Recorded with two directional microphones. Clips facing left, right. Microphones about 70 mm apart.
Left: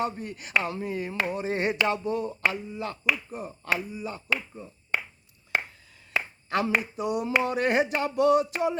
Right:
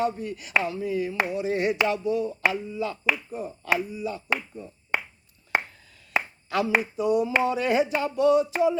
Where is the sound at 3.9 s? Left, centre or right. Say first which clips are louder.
Right 4 dB; left.